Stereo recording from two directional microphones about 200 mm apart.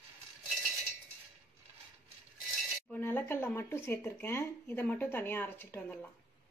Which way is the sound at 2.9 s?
10° left (ahead or behind).